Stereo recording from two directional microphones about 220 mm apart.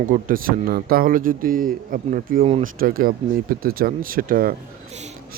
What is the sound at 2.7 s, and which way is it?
Speech, 40° right (ahead or behind).